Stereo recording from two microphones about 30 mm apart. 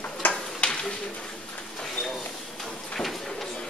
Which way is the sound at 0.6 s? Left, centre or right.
Left.